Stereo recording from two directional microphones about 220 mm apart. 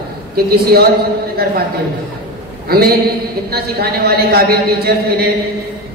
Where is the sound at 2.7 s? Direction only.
45° right (ahead or behind).